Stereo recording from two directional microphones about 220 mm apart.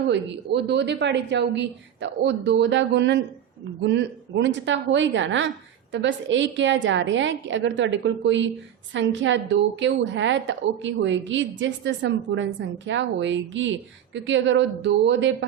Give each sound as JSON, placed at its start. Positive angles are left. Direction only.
{"t": 0.1, "sound": "a woman's voice", "side_deg": -50}